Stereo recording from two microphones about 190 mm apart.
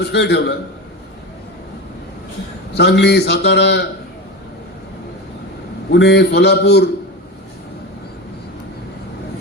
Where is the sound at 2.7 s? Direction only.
60° left (ahead or behind).